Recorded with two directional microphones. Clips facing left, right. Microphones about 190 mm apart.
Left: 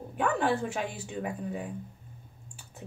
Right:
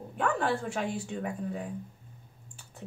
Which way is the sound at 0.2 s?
5° left (ahead or behind).